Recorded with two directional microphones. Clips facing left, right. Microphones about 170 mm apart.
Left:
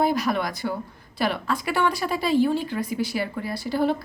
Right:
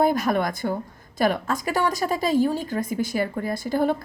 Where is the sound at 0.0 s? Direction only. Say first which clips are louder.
Right 2 dB; 50° right (ahead or behind).